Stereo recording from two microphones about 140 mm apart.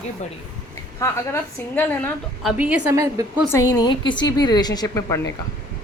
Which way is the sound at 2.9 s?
20° right (ahead or behind).